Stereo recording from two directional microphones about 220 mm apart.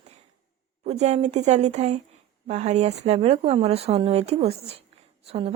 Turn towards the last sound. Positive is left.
turn(degrees=-30)  # may be behind; listen again after turning